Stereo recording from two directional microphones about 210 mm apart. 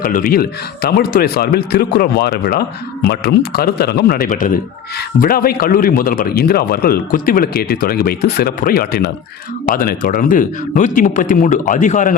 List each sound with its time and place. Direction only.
0.0 s speech: 40° left (ahead or behind)